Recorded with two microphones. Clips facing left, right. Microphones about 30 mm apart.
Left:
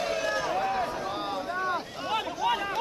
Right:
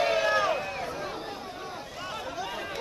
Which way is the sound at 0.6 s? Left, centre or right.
Centre.